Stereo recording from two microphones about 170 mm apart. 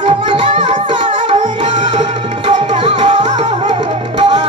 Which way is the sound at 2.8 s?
30° right (ahead or behind).